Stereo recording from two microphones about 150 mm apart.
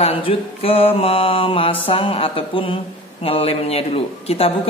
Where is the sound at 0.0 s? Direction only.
40° left (ahead or behind).